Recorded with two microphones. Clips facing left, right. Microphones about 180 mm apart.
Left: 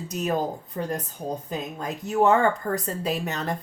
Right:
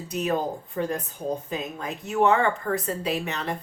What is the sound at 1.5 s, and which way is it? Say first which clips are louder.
A woman's voice: even; 40° left (ahead or behind).